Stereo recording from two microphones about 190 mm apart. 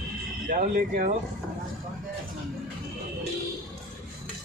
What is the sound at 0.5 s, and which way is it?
Speech, 45° right (ahead or behind).